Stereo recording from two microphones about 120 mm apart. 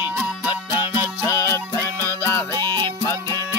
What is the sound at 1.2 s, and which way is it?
Music, 25° left (ahead or behind).